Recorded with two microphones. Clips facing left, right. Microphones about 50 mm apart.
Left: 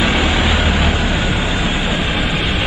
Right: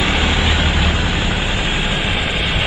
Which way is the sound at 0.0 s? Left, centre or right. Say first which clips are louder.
Left 2 dB; left.